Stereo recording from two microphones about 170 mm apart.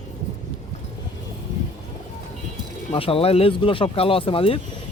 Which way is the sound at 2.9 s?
35° left (ahead or behind).